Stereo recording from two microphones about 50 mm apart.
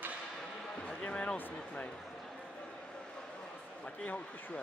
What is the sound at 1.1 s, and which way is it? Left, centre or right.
Speech, left.